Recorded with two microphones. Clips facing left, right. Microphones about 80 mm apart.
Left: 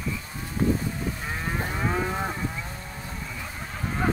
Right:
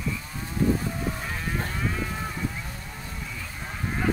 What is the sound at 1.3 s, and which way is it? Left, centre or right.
Moo, centre.